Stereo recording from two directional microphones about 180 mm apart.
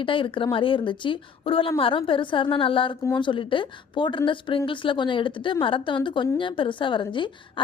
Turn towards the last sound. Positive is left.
turn(degrees=25)  # may be behind; listen again after turning